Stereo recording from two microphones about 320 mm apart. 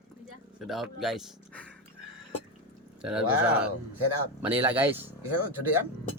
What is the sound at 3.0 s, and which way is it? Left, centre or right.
Speech, centre.